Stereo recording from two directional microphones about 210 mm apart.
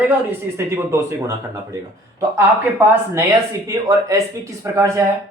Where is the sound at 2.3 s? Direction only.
10° right (ahead or behind).